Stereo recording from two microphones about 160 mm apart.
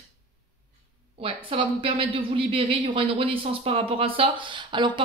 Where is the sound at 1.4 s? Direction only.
35° right (ahead or behind).